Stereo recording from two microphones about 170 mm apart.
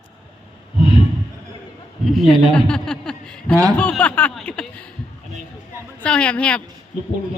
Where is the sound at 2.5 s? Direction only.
5° left (ahead or behind).